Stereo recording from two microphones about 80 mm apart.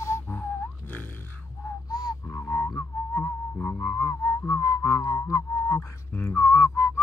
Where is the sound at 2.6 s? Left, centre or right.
Left.